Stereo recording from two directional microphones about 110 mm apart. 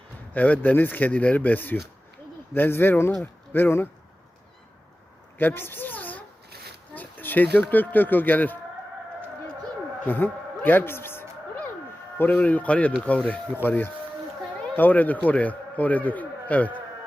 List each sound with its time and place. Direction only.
0.3 s speech: 15° left (ahead or behind)
5.4 s speech: 20° left (ahead or behind)
6.9 s a sound: 15° left (ahead or behind)
7.7 s speech: 15° left (ahead or behind)
10.1 s a sound: 15° left (ahead or behind)
12.1 s speech: 15° left (ahead or behind)